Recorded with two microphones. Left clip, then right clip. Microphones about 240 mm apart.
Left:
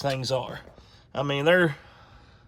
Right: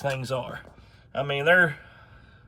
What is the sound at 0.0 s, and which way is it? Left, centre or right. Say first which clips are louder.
Speech: left 2 dB; left.